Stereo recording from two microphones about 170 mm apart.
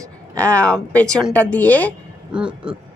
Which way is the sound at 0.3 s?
5° left (ahead or behind).